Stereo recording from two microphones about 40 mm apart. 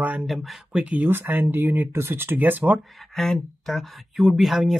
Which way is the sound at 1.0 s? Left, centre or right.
Right.